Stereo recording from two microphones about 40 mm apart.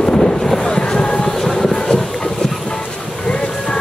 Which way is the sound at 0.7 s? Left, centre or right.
Left.